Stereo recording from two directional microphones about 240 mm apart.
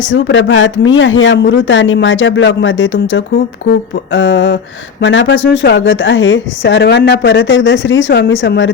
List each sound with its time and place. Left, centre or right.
0.1 s speech: left